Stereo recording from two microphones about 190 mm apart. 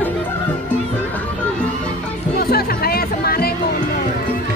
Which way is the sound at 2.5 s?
55° left (ahead or behind).